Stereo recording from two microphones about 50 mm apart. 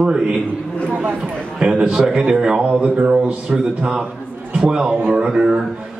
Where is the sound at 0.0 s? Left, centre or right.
Centre.